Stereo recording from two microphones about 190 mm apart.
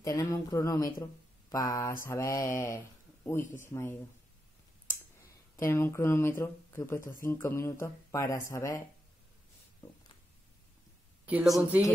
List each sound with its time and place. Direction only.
0.0 s speech: 15° left (ahead or behind)
4.8 s speech: 15° left (ahead or behind)
11.2 s a woman's voice: 5° right (ahead or behind)